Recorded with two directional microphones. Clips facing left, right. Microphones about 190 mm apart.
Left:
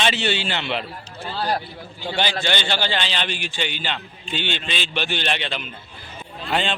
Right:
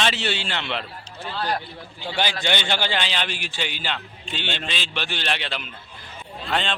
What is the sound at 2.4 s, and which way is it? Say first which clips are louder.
A man's voice: left 1 dB; 15° right (ahead or behind).